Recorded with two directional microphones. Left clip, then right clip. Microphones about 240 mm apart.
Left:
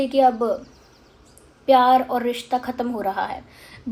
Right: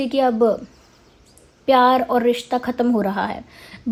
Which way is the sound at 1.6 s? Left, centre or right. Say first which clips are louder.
Even; right.